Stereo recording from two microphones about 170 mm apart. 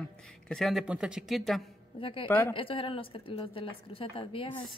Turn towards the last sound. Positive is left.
turn(degrees=30)  # may be behind; listen again after turning